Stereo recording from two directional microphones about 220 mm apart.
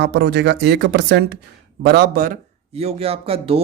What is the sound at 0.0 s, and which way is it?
Speech, 50° right (ahead or behind).